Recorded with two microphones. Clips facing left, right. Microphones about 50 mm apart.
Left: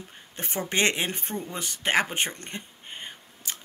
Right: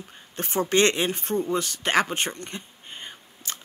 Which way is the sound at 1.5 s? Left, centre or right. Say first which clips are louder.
Even; centre.